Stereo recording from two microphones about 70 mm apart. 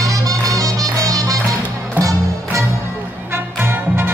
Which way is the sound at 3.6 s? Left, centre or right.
Right.